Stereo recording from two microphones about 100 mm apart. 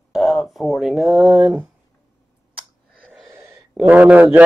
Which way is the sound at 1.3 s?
15° right (ahead or behind).